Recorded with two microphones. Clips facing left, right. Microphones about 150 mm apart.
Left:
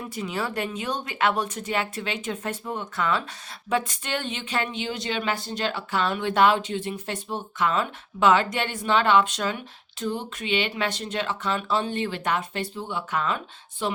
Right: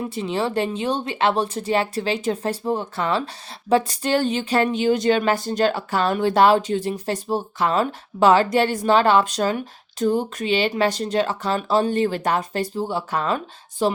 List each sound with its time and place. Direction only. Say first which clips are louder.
0.0 s speech: right 6 dB; 25° right (ahead or behind)